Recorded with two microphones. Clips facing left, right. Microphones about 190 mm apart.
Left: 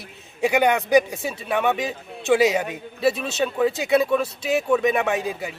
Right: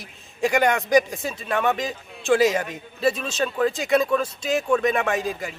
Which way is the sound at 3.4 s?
10° left (ahead or behind).